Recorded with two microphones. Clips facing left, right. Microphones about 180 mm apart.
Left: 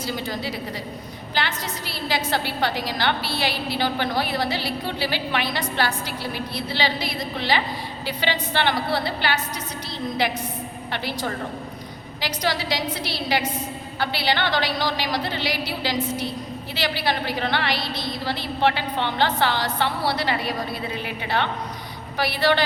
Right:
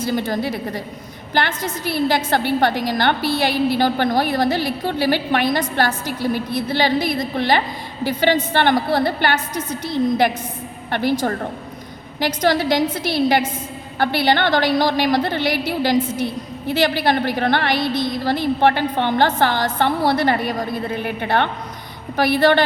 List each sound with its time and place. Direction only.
0.0 s a woman's voice: 50° right (ahead or behind)